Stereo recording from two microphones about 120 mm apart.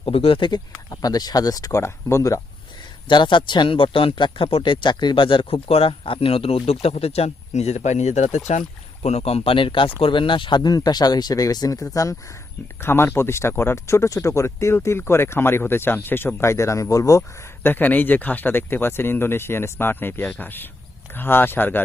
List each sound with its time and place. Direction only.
0.0 s speech: 50° left (ahead or behind); by 2.4 s 25° left (ahead or behind)
3.1 s speech: 40° left (ahead or behind); by 8.4 s 75° left (ahead or behind)
9.0 s speech: 60° left (ahead or behind); by 21.8 s 15° left (ahead or behind)